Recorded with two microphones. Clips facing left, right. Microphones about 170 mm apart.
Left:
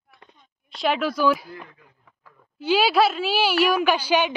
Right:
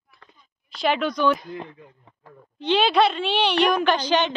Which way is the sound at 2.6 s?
5° left (ahead or behind).